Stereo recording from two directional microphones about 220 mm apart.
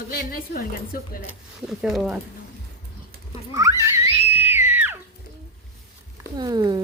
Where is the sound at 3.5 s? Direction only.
15° right (ahead or behind).